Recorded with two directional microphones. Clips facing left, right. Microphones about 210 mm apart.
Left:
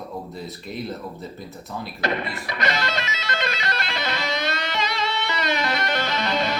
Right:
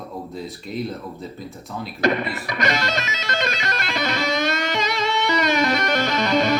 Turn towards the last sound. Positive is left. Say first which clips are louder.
# right 5 dB
turn(degrees=-45)  # may be behind; listen again after turning